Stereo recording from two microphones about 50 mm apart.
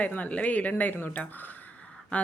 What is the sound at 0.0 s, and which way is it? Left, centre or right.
Speech, left.